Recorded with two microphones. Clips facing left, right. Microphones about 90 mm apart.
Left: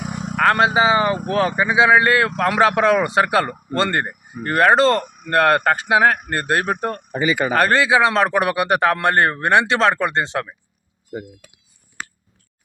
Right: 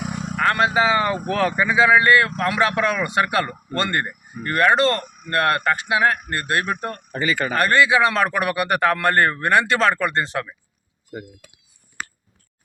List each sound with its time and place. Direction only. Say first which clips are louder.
0.0 s vehicle: even; 5° left (ahead or behind)
0.3 s vehicle: left 4 dB; 40° left (ahead or behind)
0.6 s a man's voice: even; 20° left (ahead or behind)
7.1 s speech: left 3 dB; 15° left (ahead or behind)
7.5 s a man's voice: even; 30° left (ahead or behind)